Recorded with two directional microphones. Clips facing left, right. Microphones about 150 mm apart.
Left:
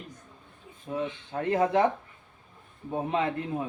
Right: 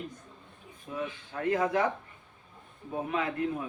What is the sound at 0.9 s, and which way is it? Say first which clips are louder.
A man's voice: left 4 dB; 30° left (ahead or behind).